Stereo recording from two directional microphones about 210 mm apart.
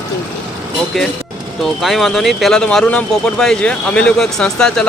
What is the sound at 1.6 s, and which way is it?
Speech, centre (ahead or behind).